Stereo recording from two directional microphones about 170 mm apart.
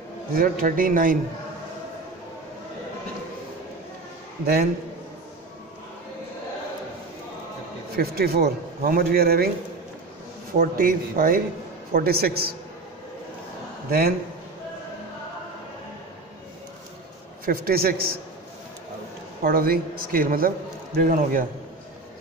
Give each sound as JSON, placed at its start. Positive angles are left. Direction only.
{"t": 0.3, "sound": "a man's voice", "side_deg": -55}
{"t": 7.9, "sound": "a man's voice", "side_deg": -65}
{"t": 10.5, "sound": "a man's voice", "side_deg": -55}
{"t": 13.8, "sound": "a man's voice", "side_deg": -65}
{"t": 17.5, "sound": "a man's voice", "side_deg": -60}
{"t": 19.4, "sound": "a man's voice", "side_deg": -60}